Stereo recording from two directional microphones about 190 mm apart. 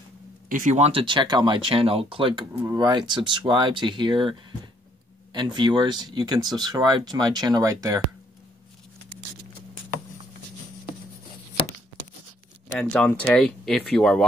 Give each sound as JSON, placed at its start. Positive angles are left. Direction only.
{"t": 0.5, "sound": "speech", "side_deg": -40}
{"t": 12.7, "sound": "speech", "side_deg": 5}